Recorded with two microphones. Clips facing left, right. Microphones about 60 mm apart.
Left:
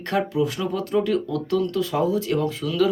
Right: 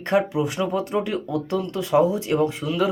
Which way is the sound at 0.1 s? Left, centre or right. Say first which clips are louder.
Right 1 dB; right.